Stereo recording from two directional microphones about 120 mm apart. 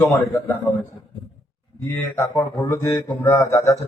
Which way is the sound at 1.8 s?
15° left (ahead or behind).